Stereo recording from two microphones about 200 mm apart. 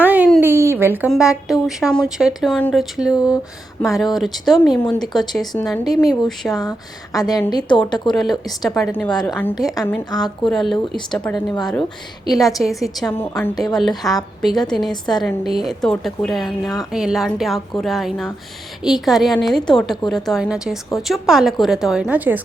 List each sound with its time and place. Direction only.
0.0 s a sound: 10° right (ahead or behind)
1.1 s speech: centre (ahead or behind)
3.8 s speech: centre (ahead or behind)
6.5 s a woman's voice: 20° left (ahead or behind)
8.1 s a woman's voice: centre (ahead or behind); by 10.3 s 20° left (ahead or behind)
10.4 s a woman's voice: centre (ahead or behind)
13.1 s a woman's voice: 10° left (ahead or behind)
14.0 s speech: centre (ahead or behind)